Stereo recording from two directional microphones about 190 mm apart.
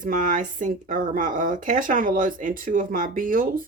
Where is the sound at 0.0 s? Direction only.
45° right (ahead or behind).